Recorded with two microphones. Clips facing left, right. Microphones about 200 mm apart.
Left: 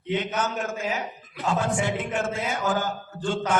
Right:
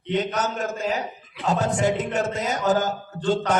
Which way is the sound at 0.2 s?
40° right (ahead or behind).